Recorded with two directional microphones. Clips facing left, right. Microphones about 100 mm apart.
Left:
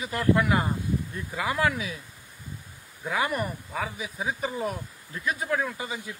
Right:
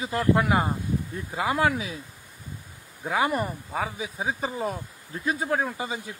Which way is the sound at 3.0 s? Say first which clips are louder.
Right 3 dB; 30° right (ahead or behind).